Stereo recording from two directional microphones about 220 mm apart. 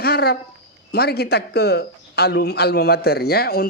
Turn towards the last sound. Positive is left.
turn(degrees=45)  # may be behind; listen again after turning